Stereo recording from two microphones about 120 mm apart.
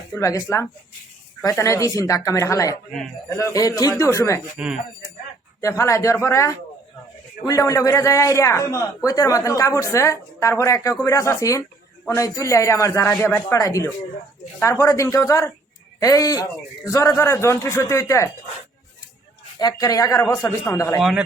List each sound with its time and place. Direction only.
0.1 s a man's voice: 25° left (ahead or behind)
4.5 s speech: 10° right (ahead or behind)
5.5 s a man's voice: 25° left (ahead or behind)
19.5 s a man's voice: 30° left (ahead or behind)
21.0 s speech: 5° right (ahead or behind)